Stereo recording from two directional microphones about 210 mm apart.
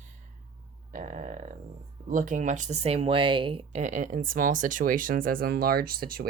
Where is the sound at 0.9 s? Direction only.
40° right (ahead or behind).